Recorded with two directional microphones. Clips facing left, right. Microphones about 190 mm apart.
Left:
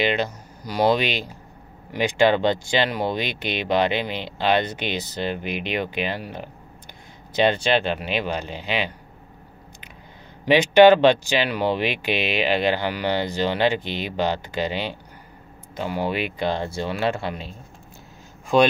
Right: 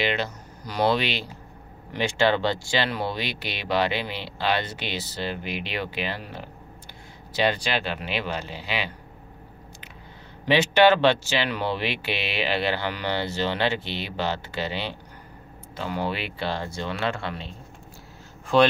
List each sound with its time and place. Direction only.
0.0 s speech: 15° left (ahead or behind)
10.4 s speech: 15° left (ahead or behind)
18.5 s speech: 15° left (ahead or behind)